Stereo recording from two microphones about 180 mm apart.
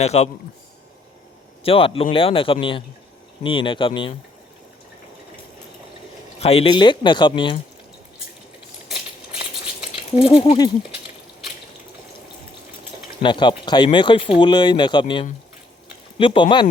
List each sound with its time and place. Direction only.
0.0 s speech: 35° left (ahead or behind)
1.6 s speech: 30° left (ahead or behind)
6.4 s speech: 35° left (ahead or behind)
10.2 s speech: 35° left (ahead or behind)
13.2 s speech: 25° left (ahead or behind)